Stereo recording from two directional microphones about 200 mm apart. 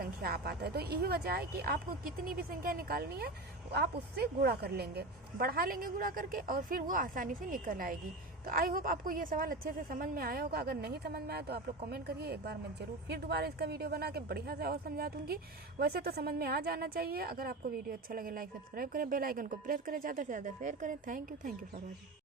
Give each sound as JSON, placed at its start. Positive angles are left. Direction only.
{"t": 0.0, "sound": "speech", "side_deg": -50}